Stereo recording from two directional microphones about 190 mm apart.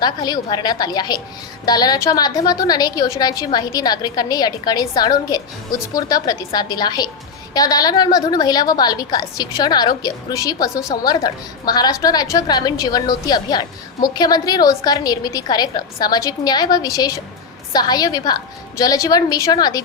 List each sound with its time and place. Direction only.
0.0 s a woman's voice: 20° left (ahead or behind)